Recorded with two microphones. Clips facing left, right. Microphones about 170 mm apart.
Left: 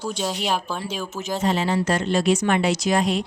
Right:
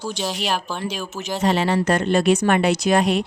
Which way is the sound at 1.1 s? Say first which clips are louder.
Right 2 dB; 75° right (ahead or behind).